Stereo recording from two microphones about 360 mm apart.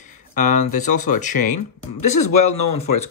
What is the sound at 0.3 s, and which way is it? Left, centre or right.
Speech, left.